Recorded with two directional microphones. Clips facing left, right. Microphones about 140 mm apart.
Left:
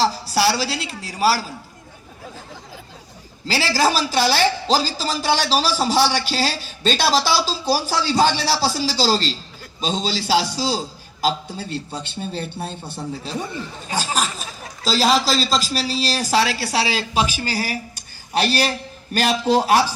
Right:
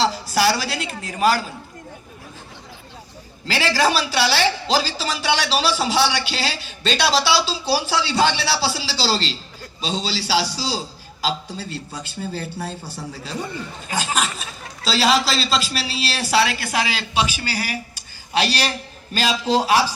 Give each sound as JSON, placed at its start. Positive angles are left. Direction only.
{"t": 0.0, "sound": "a woman's voice", "side_deg": 35}
{"t": 3.4, "sound": "a man's voice", "side_deg": 35}
{"t": 11.9, "sound": "a man's voice", "side_deg": 25}
{"t": 13.8, "sound": "a man's voice", "side_deg": 35}
{"t": 19.1, "sound": "a man's voice", "side_deg": 55}